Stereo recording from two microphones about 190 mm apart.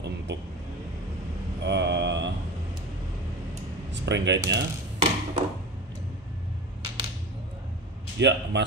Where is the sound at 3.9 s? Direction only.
65° right (ahead or behind).